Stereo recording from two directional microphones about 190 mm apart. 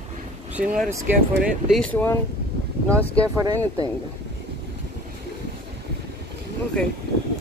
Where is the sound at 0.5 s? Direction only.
Centre (ahead or behind).